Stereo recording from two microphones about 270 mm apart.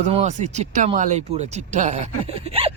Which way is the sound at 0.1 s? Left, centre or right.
Right.